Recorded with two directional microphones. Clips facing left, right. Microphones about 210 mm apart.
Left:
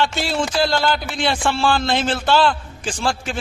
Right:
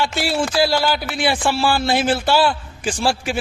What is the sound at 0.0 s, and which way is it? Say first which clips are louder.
A man's voice: even; 10° right (ahead or behind).